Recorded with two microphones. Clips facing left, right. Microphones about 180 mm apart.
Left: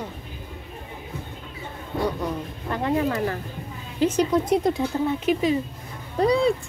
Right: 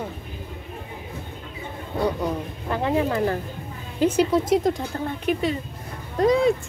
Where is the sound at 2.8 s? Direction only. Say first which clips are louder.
Right 1 dB; 20° right (ahead or behind).